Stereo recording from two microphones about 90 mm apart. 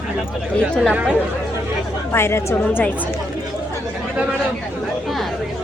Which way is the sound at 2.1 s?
30° left (ahead or behind).